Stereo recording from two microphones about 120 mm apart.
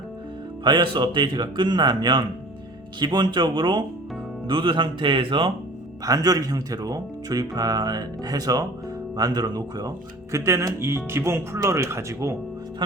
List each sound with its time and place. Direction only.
0.6 s speech: 40° right (ahead or behind)
6.1 s speech: 30° right (ahead or behind)